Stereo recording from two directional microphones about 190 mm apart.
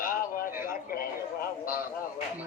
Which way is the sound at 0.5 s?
10° right (ahead or behind).